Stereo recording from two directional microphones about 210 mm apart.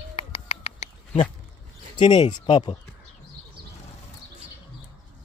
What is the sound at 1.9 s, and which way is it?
Speech, 20° left (ahead or behind).